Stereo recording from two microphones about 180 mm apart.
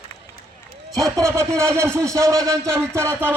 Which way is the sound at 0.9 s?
20° right (ahead or behind).